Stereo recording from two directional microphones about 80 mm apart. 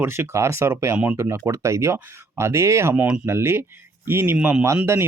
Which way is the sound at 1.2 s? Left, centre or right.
Right.